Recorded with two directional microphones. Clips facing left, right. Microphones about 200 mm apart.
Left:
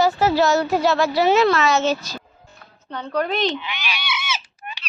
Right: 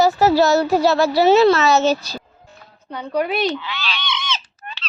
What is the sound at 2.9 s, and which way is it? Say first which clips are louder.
Speech: right 2 dB; 10° right (ahead or behind).